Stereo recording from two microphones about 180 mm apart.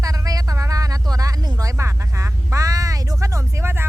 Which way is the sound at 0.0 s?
20° right (ahead or behind).